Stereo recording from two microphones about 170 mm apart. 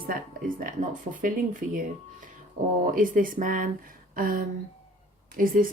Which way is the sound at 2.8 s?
50° right (ahead or behind).